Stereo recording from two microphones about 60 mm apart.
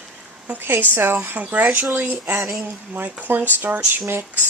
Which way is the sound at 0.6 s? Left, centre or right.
Right.